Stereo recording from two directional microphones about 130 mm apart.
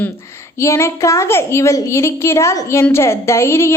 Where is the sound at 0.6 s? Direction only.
20° left (ahead or behind).